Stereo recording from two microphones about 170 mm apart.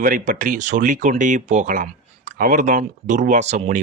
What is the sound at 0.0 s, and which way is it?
Speech, 50° right (ahead or behind).